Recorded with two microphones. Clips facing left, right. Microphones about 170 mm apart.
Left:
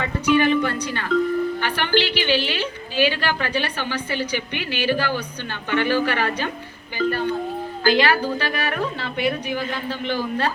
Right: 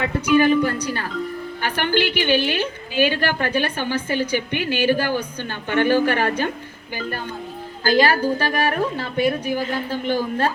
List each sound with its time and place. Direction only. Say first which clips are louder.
0.3 s a woman's voice: right 2 dB; 40° right (ahead or behind)
7.9 s a woman's voice: right 1 dB; 45° right (ahead or behind)